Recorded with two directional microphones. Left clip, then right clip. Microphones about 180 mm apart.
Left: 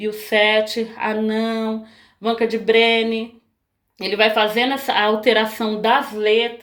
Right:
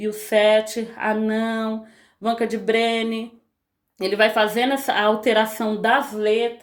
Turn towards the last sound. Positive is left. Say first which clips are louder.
# left 3 dB
turn(degrees=-45)  # may be behind; listen again after turning